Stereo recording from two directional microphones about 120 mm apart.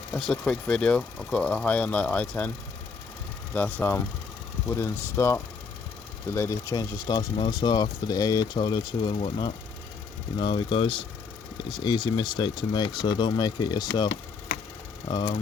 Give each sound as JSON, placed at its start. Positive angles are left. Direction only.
{"t": 0.1, "sound": "speech", "side_deg": 5}
{"t": 3.5, "sound": "speech", "side_deg": 15}
{"t": 10.3, "sound": "speech", "side_deg": 40}